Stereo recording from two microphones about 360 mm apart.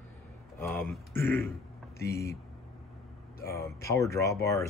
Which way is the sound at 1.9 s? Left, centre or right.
Left.